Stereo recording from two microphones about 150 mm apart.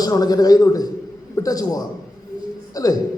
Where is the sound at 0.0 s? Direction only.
25° left (ahead or behind).